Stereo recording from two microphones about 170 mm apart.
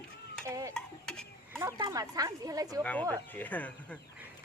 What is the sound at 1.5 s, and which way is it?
Speech, 15° right (ahead or behind).